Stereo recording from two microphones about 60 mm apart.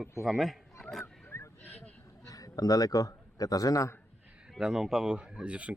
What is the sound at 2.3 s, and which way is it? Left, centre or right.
A man's voice, left.